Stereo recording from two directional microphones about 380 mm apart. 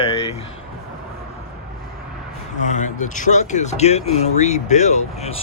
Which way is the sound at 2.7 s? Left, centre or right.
Centre.